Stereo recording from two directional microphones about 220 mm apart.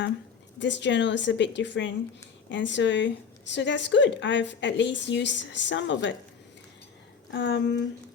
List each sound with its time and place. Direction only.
0.6 s a woman's voice: 55° left (ahead or behind)
7.3 s a woman's voice: 55° left (ahead or behind)